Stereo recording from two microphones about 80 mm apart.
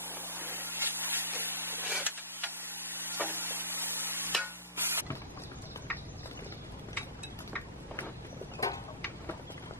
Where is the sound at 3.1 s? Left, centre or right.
Right.